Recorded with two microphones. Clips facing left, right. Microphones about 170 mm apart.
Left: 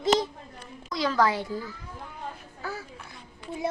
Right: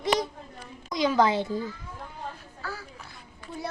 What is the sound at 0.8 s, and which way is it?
Speech, 20° right (ahead or behind).